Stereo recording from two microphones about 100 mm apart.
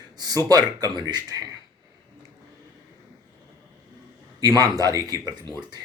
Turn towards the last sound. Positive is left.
turn(degrees=-40)  # may be behind; listen again after turning